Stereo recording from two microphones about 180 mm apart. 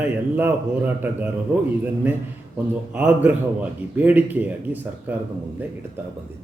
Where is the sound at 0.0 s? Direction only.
10° right (ahead or behind).